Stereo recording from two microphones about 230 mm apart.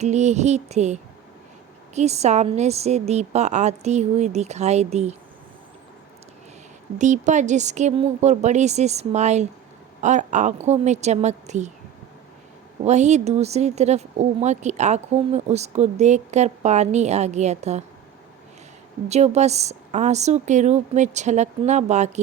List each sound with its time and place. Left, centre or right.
0.0 s speech: right
2.0 s speech: right
7.0 s a woman's voice: right
12.8 s speech: right
19.0 s a woman's voice: right